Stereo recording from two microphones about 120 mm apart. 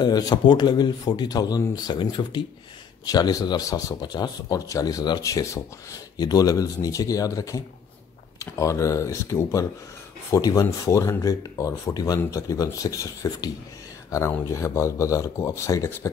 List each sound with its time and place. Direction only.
0.0 s speech: 35° left (ahead or behind)